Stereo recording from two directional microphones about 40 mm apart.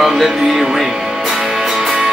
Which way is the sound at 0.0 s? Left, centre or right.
Centre.